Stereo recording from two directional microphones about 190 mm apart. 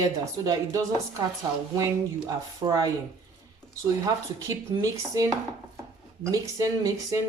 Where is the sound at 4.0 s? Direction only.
15° right (ahead or behind).